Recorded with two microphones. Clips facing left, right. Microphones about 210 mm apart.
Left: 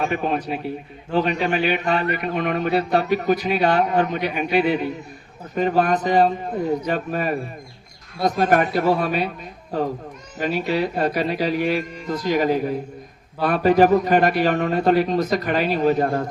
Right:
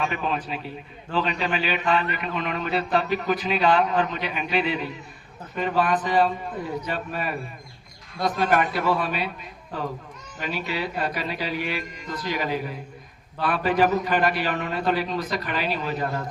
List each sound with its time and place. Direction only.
0.0 s a man's voice: 55° left (ahead or behind)
1.8 s a man's voice: 40° left (ahead or behind)
10.4 s a man's voice: 40° left (ahead or behind)